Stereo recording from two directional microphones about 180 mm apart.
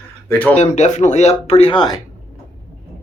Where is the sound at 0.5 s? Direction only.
40° left (ahead or behind).